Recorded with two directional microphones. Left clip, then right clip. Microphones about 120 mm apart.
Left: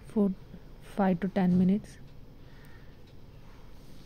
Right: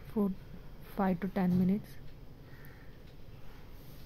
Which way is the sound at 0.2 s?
25° left (ahead or behind).